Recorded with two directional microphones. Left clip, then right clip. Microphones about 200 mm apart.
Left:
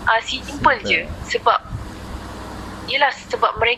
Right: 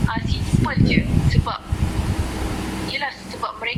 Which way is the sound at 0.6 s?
50° left (ahead or behind).